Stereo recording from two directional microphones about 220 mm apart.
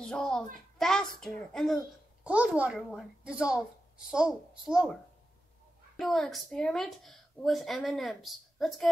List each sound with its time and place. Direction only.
0.0 s a child's voice: 5° left (ahead or behind)
5.9 s a woman's voice: centre (ahead or behind)